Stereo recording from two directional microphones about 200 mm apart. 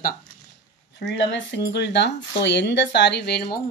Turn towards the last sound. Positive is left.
turn(degrees=50)  # may be behind; listen again after turning